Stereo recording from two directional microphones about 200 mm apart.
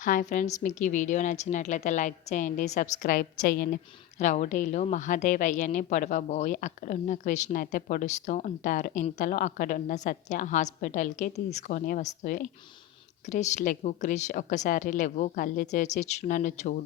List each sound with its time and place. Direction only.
0.0 s a woman's voice: 40° left (ahead or behind)